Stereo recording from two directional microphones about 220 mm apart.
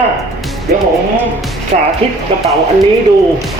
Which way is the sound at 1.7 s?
35° right (ahead or behind).